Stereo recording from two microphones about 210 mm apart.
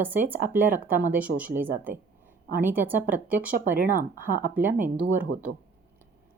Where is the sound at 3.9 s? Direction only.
45° right (ahead or behind).